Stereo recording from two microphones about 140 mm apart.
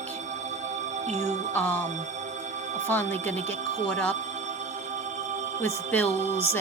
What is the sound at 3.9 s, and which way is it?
Speech, 10° left (ahead or behind).